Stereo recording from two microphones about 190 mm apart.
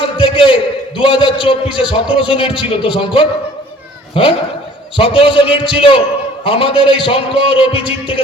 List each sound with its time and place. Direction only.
0.0 s a man's voice: 30° left (ahead or behind)